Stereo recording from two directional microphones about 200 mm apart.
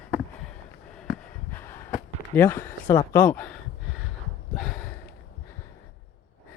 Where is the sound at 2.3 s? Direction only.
10° left (ahead or behind).